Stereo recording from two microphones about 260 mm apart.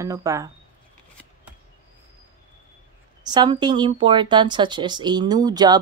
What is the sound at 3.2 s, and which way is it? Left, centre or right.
Speech, centre.